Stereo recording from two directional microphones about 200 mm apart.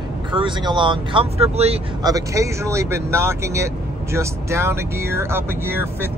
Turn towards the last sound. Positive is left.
turn(degrees=-10)  # may be behind; listen again after turning